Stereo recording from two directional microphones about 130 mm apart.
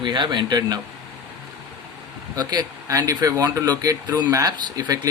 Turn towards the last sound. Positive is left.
turn(degrees=-30)  # may be behind; listen again after turning